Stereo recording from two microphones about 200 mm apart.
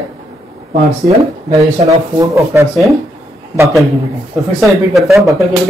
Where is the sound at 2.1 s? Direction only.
15° right (ahead or behind).